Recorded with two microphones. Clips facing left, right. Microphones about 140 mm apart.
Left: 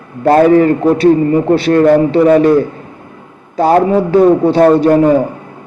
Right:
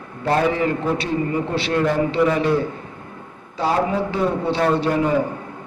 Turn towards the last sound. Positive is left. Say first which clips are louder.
# left 11 dB
turn(degrees=45)  # may be behind; listen again after turning